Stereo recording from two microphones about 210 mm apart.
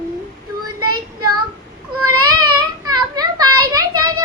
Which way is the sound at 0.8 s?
90° right.